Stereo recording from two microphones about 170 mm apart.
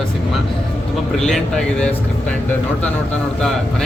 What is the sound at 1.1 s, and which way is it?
Speech, centre (ahead or behind).